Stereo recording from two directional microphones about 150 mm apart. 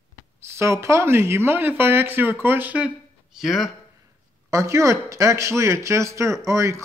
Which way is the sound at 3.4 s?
Centre (ahead or behind).